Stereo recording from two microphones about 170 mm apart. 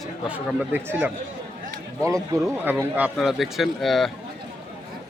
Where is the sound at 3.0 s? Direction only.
Centre (ahead or behind).